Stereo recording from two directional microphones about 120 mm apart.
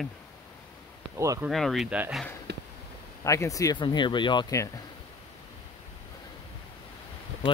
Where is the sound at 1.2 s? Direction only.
25° right (ahead or behind).